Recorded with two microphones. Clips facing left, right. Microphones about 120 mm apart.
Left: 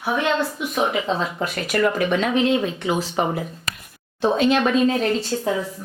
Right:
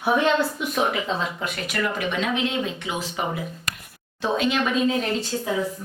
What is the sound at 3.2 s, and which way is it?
Speech, 40° left (ahead or behind).